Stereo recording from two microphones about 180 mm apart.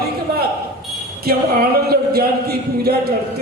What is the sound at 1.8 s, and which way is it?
Music, 60° right (ahead or behind).